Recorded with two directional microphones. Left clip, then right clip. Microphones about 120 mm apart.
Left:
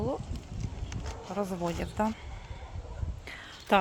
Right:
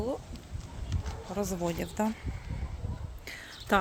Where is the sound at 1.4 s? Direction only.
20° right (ahead or behind).